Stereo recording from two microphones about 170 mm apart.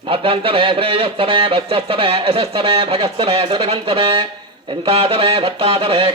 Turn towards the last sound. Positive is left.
turn(degrees=-30)  # may be behind; listen again after turning